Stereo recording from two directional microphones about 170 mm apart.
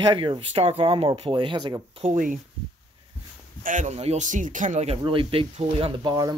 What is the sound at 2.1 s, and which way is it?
Speech, 50° right (ahead or behind).